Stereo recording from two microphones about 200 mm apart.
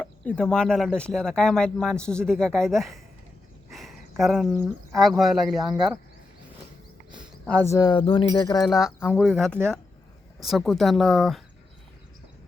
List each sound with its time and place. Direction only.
0.0 s speech: 5° left (ahead or behind)
7.4 s speech: 15° left (ahead or behind)
8.6 s speech: centre (ahead or behind)
9.0 s speech: 10° left (ahead or behind)